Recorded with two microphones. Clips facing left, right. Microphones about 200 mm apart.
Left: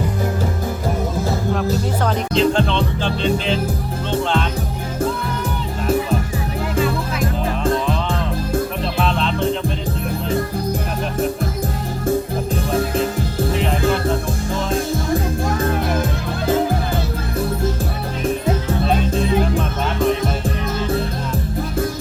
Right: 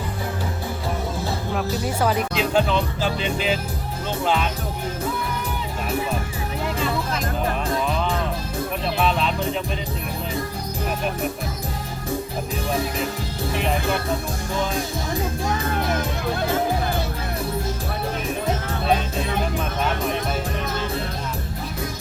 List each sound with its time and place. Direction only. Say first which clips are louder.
2.0 s music: left 7 dB; 5° right (ahead or behind)
9.0 s music: left 2 dB; 5° right (ahead or behind)